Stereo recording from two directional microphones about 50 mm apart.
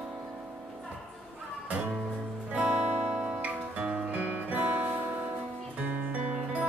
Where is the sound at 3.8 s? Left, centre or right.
Right.